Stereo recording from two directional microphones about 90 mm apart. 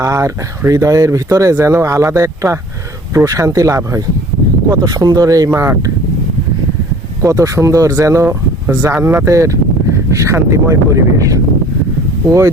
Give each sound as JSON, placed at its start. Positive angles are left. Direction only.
{"t": 0.0, "sound": "speech", "side_deg": -35}
{"t": 7.2, "sound": "speech", "side_deg": -40}